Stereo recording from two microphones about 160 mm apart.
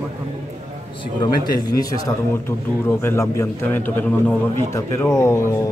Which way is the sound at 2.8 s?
15° left (ahead or behind).